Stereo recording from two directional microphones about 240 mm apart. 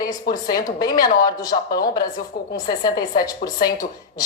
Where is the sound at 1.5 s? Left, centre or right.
Left.